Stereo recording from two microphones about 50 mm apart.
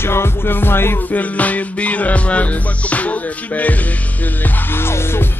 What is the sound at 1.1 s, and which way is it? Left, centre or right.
Music, left.